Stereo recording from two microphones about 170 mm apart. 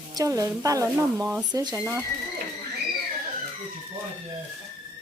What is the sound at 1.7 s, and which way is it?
Speech, 15° right (ahead or behind).